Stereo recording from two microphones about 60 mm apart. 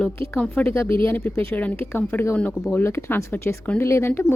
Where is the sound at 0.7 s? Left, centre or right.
Left.